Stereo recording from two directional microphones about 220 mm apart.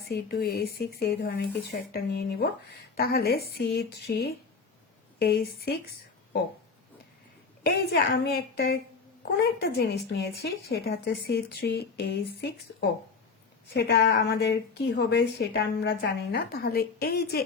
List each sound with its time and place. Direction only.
0.0 s a woman's voice: 45° left (ahead or behind)
7.6 s a woman's voice: 45° left (ahead or behind)
13.7 s a woman's voice: 45° left (ahead or behind)